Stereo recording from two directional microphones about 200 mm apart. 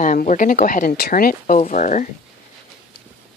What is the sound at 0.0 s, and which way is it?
Speech, 40° left (ahead or behind).